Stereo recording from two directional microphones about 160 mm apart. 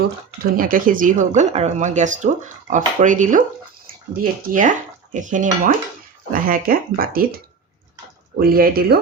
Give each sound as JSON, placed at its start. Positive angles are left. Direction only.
{"t": 0.5, "sound": "speech", "side_deg": -60}
{"t": 1.4, "sound": "speech", "side_deg": -45}
{"t": 4.4, "sound": "speech", "side_deg": -55}
{"t": 6.3, "sound": "speech", "side_deg": -65}
{"t": 8.4, "sound": "speech", "side_deg": -65}